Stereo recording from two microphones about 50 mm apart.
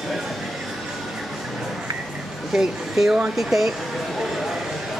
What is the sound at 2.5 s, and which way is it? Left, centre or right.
Speech, centre.